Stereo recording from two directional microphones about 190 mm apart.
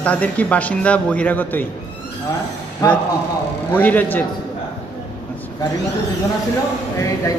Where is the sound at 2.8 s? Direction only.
20° left (ahead or behind).